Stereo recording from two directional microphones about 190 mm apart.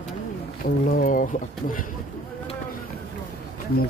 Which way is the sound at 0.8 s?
45° left (ahead or behind).